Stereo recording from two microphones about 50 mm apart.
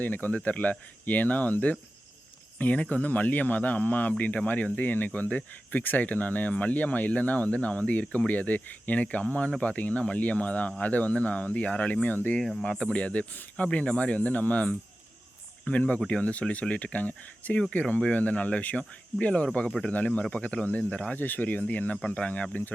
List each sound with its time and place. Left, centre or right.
0.0 s speech: left
12.4 s speech: centre
12.7 s speech: centre